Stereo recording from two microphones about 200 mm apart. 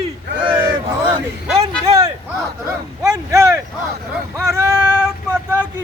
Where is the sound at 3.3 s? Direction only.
15° right (ahead or behind).